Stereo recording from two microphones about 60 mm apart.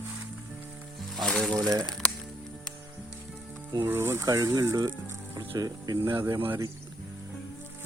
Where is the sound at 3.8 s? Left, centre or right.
Right.